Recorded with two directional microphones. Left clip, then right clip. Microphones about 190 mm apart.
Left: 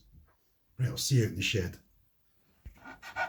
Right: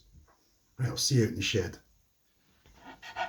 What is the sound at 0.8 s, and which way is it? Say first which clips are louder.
Speech: right 3 dB; 5° right (ahead or behind).